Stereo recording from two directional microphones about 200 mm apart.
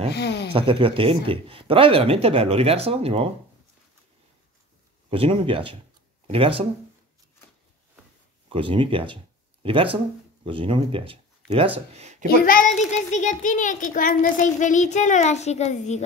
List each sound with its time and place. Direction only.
0.1 s speech: 55° left (ahead or behind)
0.5 s speech: 25° right (ahead or behind)
5.1 s speech: 25° right (ahead or behind)
8.5 s speech: 25° right (ahead or behind)
12.4 s a child's voice: 40° left (ahead or behind)